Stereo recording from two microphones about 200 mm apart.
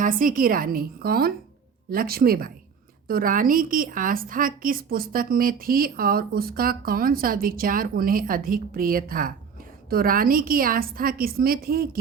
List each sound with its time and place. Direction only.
0.0 s a woman's voice: 45° right (ahead or behind)